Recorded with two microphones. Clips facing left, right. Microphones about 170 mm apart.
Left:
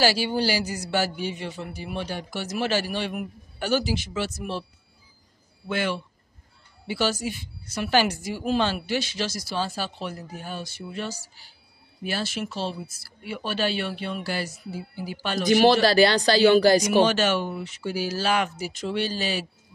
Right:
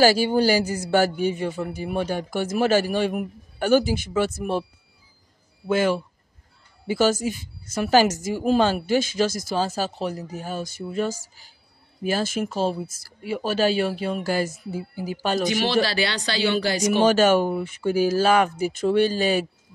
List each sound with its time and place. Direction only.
0.0 s speech: 45° right (ahead or behind)
5.7 s speech: 45° right (ahead or behind)
15.5 s speech: 45° left (ahead or behind)
17.0 s speech: 45° right (ahead or behind)